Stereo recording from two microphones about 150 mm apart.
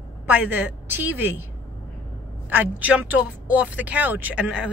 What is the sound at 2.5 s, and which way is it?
Speech, 10° right (ahead or behind).